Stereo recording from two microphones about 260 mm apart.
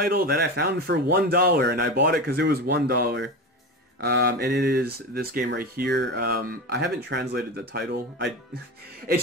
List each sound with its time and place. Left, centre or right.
0.0 s speech: right